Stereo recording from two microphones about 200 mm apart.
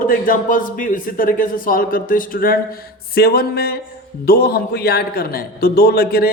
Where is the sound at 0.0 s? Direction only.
45° left (ahead or behind).